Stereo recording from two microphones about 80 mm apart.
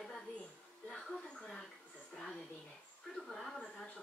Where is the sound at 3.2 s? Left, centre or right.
Centre.